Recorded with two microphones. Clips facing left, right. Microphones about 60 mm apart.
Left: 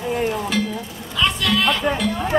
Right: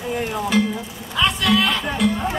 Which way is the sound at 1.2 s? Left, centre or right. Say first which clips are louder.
Right 2 dB; centre.